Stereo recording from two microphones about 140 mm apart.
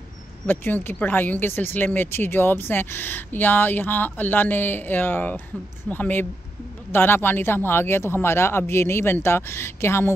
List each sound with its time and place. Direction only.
0.5 s speech: 15° left (ahead or behind)